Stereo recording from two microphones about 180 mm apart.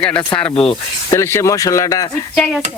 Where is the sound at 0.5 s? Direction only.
30° left (ahead or behind).